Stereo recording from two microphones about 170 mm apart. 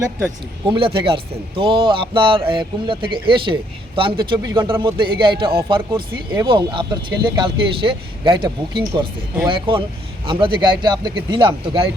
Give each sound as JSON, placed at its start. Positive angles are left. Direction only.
{"t": 0.6, "sound": "speech", "side_deg": -30}